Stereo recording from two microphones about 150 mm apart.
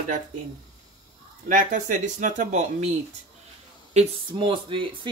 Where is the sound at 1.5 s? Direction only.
60° right (ahead or behind).